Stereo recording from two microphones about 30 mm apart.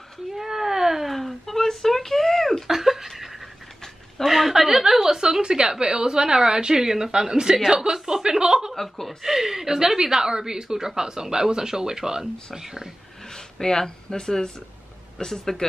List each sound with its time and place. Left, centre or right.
0.3 s a sound: centre
1.0 s a sound: centre
2.7 s laughter: centre
4.3 s a woman's voice: centre
5.2 s a woman's voice: right
8.8 s speech: centre
9.2 s a woman's voice: centre
13.3 s speech: centre